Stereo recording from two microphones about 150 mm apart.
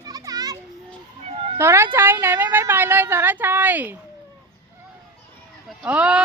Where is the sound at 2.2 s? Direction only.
15° right (ahead or behind).